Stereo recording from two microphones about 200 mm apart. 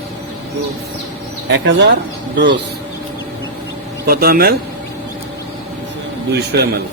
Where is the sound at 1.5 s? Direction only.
60° right (ahead or behind).